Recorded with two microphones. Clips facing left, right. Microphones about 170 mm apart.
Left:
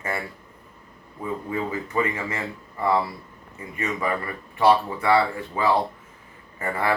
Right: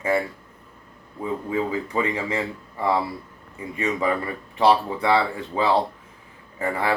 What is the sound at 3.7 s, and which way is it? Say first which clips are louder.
Speech: right 3 dB; 15° right (ahead or behind).